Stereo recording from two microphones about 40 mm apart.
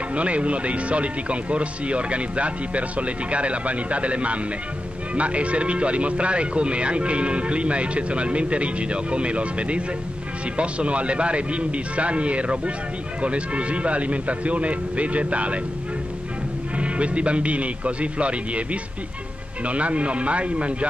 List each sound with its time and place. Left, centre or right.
0.1 s speech: right
16.7 s speech: right